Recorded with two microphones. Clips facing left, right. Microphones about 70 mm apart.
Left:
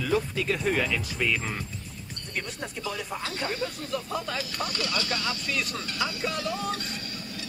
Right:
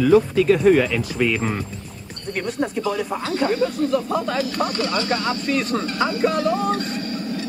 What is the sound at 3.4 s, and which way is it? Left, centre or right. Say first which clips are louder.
Speech: right 15 dB; right.